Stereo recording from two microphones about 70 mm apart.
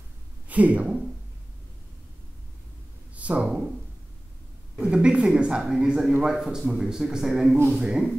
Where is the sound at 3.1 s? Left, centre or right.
Centre.